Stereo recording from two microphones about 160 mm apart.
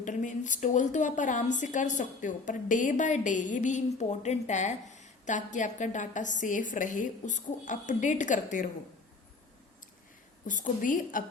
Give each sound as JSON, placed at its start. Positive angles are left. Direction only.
{"t": 0.0, "sound": "a woman's voice", "side_deg": 50}
{"t": 10.4, "sound": "a woman's voice", "side_deg": 55}